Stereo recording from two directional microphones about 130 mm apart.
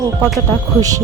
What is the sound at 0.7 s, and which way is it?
Speech, 25° right (ahead or behind).